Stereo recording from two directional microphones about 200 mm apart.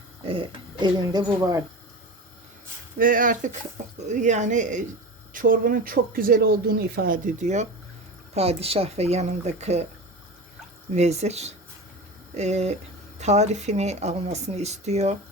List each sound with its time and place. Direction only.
0.2 s speech: 25° right (ahead or behind)
3.0 s speech: 45° right (ahead or behind)
10.9 s speech: 35° right (ahead or behind)